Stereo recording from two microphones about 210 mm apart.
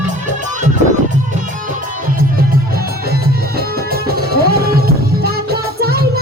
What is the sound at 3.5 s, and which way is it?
Music, 45° right (ahead or behind).